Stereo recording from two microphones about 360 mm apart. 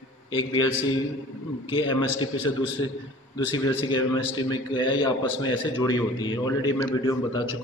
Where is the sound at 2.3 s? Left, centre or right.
Left.